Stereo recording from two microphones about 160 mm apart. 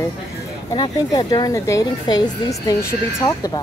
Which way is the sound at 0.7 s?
25° left (ahead or behind).